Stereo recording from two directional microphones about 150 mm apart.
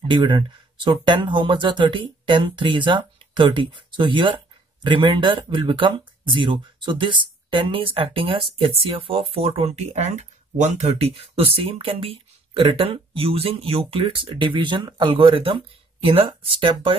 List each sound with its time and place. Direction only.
0.1 s speech: 30° right (ahead or behind)